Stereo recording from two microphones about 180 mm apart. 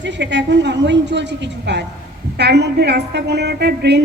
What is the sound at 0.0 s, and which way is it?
A woman's voice, 80° right.